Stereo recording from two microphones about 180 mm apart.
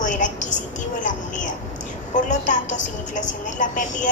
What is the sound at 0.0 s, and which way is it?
Music, 45° left (ahead or behind).